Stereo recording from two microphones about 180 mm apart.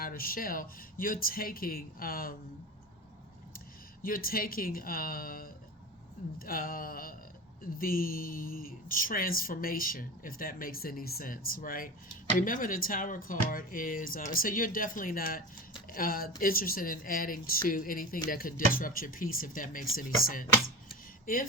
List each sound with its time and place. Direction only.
0.0 s speech: 55° left (ahead or behind)
4.0 s speech: 55° left (ahead or behind)